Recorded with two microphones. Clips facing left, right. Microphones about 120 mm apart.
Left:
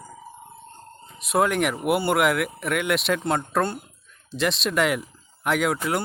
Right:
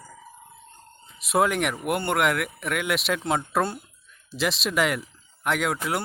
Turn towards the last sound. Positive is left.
turn(degrees=0)  # may be behind; listen again after turning